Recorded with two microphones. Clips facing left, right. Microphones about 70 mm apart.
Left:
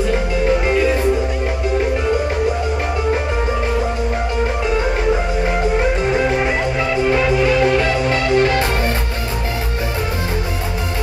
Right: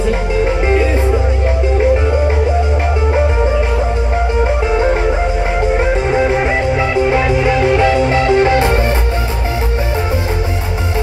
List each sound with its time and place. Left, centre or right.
6.8 s music: right